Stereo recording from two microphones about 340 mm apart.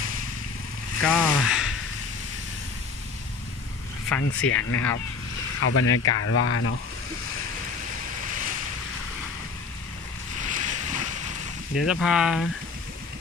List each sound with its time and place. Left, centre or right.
1.0 s a sound: centre
4.2 s speech: left
10.4 s boat: right
11.7 s speech: centre